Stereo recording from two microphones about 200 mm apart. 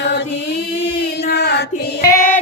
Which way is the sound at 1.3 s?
55° left (ahead or behind).